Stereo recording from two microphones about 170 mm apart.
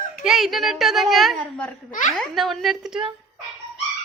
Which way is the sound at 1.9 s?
50° left (ahead or behind).